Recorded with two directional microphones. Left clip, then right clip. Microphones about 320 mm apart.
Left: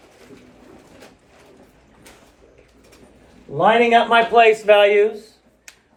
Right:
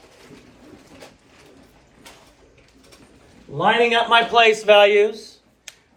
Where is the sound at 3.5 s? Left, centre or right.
Centre.